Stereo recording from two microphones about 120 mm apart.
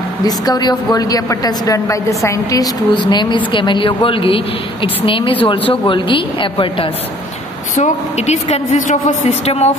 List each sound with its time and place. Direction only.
0.2 s a woman's voice: 35° left (ahead or behind)
7.7 s a woman's voice: 75° left (ahead or behind)
9.5 s speech: 65° left (ahead or behind)